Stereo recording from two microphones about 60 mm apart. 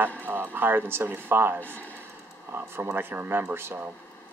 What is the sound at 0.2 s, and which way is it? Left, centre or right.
Speech, right.